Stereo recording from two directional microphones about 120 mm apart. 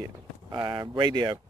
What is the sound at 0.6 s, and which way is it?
Speech, 35° right (ahead or behind).